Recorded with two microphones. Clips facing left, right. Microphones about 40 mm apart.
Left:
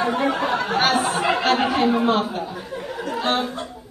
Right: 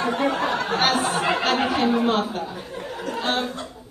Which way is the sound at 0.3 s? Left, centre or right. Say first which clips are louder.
Left 2 dB; left.